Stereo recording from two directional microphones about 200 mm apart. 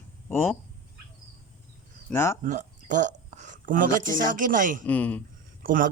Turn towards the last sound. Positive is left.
turn(degrees=-45)  # may be behind; listen again after turning